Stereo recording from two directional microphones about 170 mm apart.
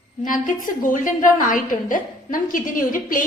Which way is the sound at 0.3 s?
50° left (ahead or behind).